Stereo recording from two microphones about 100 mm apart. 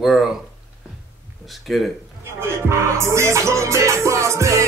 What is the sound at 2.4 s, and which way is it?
Music, 25° right (ahead or behind).